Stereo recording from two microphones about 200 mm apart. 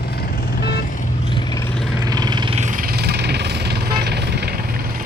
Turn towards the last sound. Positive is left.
turn(degrees=-50)  # may be behind; listen again after turning